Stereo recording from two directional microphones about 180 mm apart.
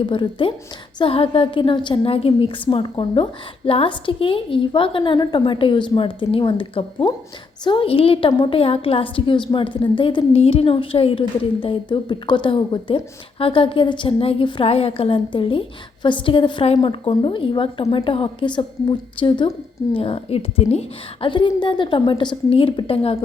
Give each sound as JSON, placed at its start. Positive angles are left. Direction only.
{"t": 0.0, "sound": "a woman's voice", "side_deg": 25}